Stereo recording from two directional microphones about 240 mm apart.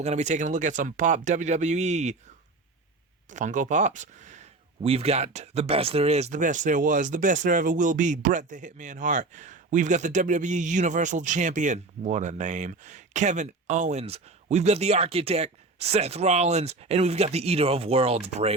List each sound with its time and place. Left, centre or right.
0.0 s speech: right
3.2 s speech: right